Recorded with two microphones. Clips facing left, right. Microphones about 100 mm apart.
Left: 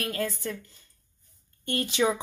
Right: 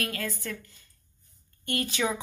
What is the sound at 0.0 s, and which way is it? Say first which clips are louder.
Speech: left 3 dB; 25° left (ahead or behind).